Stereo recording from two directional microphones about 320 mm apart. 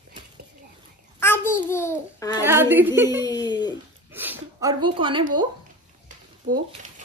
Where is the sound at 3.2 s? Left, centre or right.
Centre.